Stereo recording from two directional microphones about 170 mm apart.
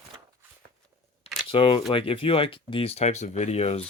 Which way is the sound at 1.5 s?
30° left (ahead or behind).